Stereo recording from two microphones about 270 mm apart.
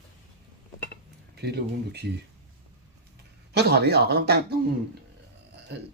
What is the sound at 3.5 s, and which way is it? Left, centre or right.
Speech, right.